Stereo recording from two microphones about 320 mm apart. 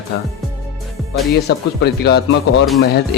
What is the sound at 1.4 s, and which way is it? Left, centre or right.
Speech, left.